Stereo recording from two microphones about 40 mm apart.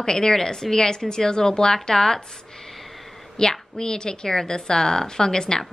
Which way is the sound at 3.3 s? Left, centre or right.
Centre.